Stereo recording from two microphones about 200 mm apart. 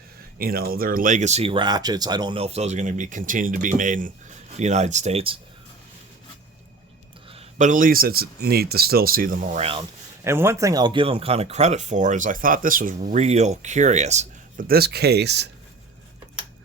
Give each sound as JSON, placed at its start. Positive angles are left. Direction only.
{"t": 0.3, "sound": "speech", "side_deg": -50}
{"t": 7.3, "sound": "speech", "side_deg": -35}
{"t": 10.2, "sound": "speech", "side_deg": -10}
{"t": 14.7, "sound": "speech", "side_deg": -55}